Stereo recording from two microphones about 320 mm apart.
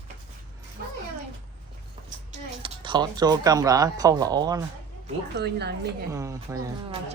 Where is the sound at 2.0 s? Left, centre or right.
Centre.